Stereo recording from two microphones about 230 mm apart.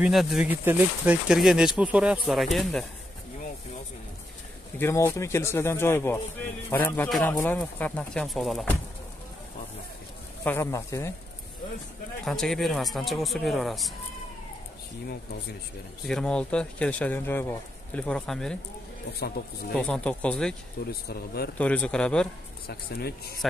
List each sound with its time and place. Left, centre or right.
0.0 s speech: centre
4.7 s speech: centre
10.4 s speech: centre
12.3 s speech: centre
16.1 s speech: centre
19.1 s speech: left
19.7 s speech: centre
20.8 s speech: left
21.5 s speech: centre
22.7 s speech: left